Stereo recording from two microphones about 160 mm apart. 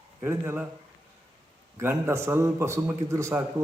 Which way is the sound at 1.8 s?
15° right (ahead or behind).